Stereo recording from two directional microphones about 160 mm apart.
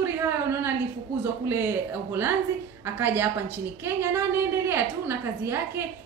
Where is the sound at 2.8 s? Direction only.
15° right (ahead or behind).